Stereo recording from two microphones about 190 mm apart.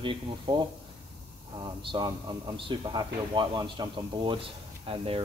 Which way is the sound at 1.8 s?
25° right (ahead or behind).